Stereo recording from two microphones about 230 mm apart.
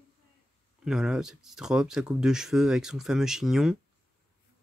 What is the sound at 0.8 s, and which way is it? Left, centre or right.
Speech, centre.